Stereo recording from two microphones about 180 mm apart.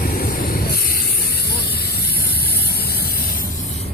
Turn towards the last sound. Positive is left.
turn(degrees=60)  # may be behind; listen again after turning